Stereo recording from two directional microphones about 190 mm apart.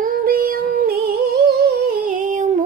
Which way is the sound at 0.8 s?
50° right (ahead or behind).